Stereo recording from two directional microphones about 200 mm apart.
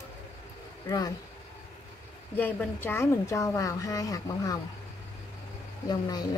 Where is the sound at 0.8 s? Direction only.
20° left (ahead or behind).